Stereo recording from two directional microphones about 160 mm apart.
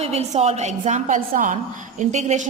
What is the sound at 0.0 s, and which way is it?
A woman's voice, 40° right (ahead or behind).